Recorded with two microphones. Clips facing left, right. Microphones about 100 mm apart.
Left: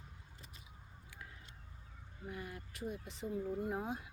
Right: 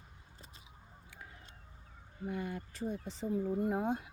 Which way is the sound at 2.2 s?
65° right (ahead or behind).